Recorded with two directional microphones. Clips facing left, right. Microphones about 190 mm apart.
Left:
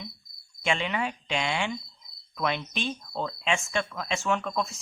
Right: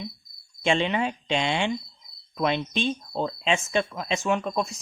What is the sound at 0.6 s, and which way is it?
Speech, 25° right (ahead or behind).